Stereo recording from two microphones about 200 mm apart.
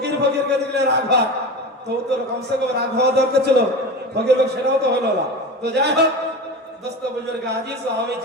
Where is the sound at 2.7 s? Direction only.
55° right (ahead or behind).